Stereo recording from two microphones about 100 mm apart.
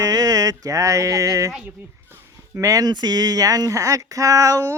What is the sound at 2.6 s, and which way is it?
Speech, 35° right (ahead or behind).